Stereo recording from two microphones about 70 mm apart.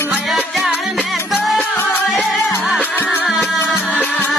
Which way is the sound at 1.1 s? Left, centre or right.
Centre.